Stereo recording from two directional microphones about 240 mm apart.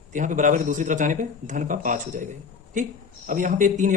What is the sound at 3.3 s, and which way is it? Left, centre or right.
Speech, right.